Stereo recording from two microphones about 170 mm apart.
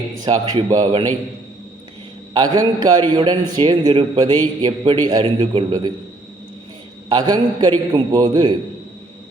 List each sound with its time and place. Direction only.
0.3 s a man's voice: 20° right (ahead or behind)
2.3 s a man's voice: 25° right (ahead or behind)
7.1 s a man's voice: 25° right (ahead or behind)